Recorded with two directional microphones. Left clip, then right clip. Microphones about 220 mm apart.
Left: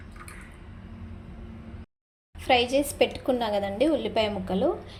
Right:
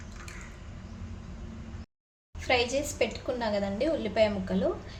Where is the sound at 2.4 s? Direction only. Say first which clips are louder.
Left 5 dB; 20° left (ahead or behind).